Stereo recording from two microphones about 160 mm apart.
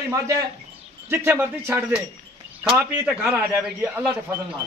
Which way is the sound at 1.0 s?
15° right (ahead or behind).